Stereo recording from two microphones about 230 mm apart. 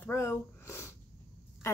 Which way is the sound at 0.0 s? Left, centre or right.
Centre.